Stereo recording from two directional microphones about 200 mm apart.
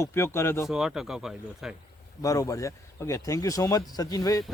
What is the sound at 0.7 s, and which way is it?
Speech, centre (ahead or behind).